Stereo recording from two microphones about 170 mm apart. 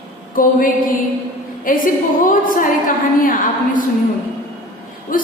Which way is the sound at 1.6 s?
55° left (ahead or behind).